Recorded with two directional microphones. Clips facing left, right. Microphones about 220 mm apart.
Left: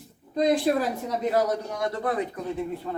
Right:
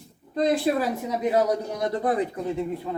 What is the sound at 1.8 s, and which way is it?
Speech, 20° right (ahead or behind).